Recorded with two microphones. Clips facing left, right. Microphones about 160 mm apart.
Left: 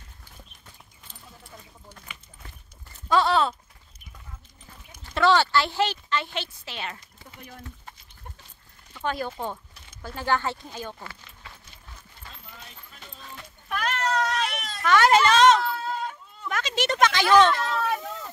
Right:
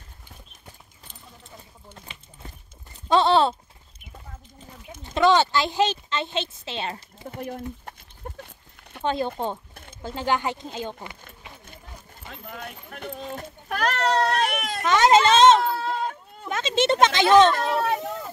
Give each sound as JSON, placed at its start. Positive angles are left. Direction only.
{"t": 1.9, "sound": "a sound", "side_deg": -25}
{"t": 3.1, "sound": "speech", "side_deg": -25}
{"t": 4.9, "sound": "speech", "side_deg": -20}
{"t": 7.2, "sound": "speech", "side_deg": -55}
{"t": 8.4, "sound": "a sound", "side_deg": -60}
{"t": 9.0, "sound": "speech", "side_deg": -25}
{"t": 12.3, "sound": "speech", "side_deg": -60}
{"t": 13.3, "sound": "a child's voice", "side_deg": -45}
{"t": 14.2, "sound": "speech", "side_deg": -50}
{"t": 14.8, "sound": "speech", "side_deg": -20}
{"t": 15.7, "sound": "a sound", "side_deg": -35}
{"t": 16.4, "sound": "speech", "side_deg": -25}
{"t": 17.6, "sound": "speech", "side_deg": -60}
{"t": 17.8, "sound": "speech", "side_deg": -20}